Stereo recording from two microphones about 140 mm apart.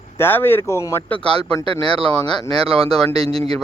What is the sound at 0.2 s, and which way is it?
Speech, 15° left (ahead or behind).